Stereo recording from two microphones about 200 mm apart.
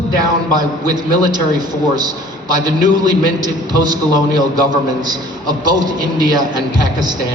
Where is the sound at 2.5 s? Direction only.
20° right (ahead or behind).